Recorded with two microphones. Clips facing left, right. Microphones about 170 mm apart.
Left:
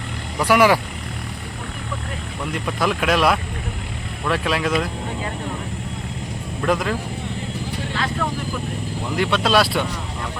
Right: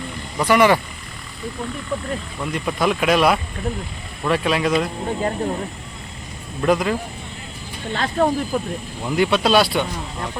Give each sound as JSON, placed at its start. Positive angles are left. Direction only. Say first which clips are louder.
{"t": 0.3, "sound": "speech", "louder": "even", "side_deg": 5}
{"t": 2.5, "sound": "speech", "louder": "right 2 dB", "side_deg": 0}
{"t": 6.6, "sound": "speech", "louder": "right 3 dB", "side_deg": 0}
{"t": 7.9, "sound": "speech", "louder": "right 7 dB", "side_deg": -40}
{"t": 9.1, "sound": "speech", "louder": "right 2 dB", "side_deg": -5}